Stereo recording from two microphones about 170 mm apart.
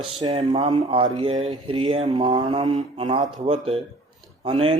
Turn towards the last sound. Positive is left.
turn(degrees=-30)  # may be behind; listen again after turning